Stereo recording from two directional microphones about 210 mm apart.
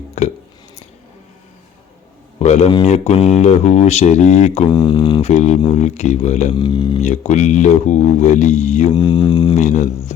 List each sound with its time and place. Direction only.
0.2 s a sound: 35° left (ahead or behind)
2.4 s speech: 30° left (ahead or behind)
4.7 s speech: 20° left (ahead or behind)
6.6 s mantra: 20° left (ahead or behind)
7.0 s speech: 35° left (ahead or behind)
8.9 s mantra: 20° left (ahead or behind)
9.6 s speech: 35° left (ahead or behind)